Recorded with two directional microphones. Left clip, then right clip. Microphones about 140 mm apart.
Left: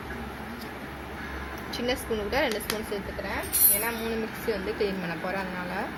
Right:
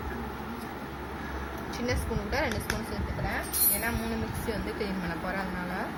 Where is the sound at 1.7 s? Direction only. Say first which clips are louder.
Left 4 dB; 50° left (ahead or behind).